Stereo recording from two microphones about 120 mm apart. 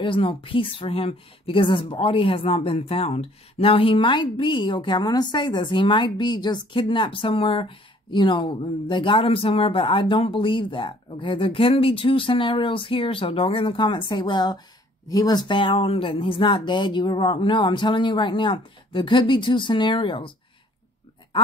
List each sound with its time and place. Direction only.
0.0 s a woman's voice: 45° left (ahead or behind)